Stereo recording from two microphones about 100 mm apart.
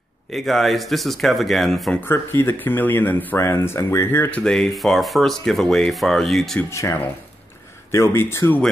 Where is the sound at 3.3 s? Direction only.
30° left (ahead or behind).